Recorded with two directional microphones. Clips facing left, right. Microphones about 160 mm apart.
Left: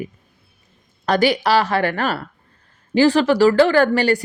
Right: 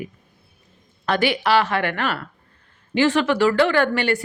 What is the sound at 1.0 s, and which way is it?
Speech, 40° left (ahead or behind).